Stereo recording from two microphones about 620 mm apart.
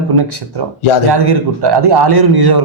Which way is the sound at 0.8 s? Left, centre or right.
Left.